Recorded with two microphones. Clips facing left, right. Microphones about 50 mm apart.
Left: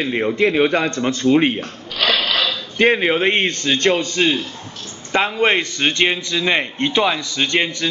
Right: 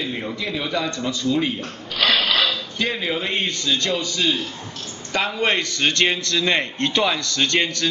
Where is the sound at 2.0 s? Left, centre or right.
Centre.